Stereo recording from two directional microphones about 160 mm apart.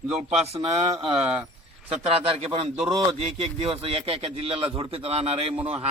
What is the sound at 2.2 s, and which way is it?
Speech, 35° right (ahead or behind).